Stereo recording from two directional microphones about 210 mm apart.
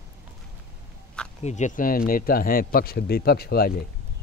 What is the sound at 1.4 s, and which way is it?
A man's voice, 35° left (ahead or behind).